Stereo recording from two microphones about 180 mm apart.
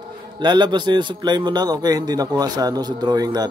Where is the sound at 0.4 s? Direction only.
25° right (ahead or behind).